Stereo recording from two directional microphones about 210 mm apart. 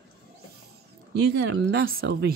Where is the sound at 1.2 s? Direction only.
50° right (ahead or behind).